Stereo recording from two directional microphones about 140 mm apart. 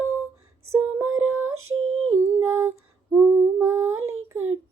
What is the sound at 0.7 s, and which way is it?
Female singing, 15° right (ahead or behind).